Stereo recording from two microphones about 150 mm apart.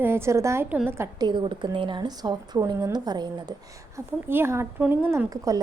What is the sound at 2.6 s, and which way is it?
Speech, 20° right (ahead or behind).